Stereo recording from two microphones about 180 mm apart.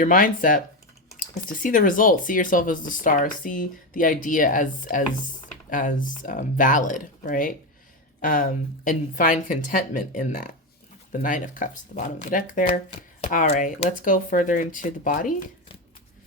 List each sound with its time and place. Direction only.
0.0 s speech: 50° left (ahead or behind)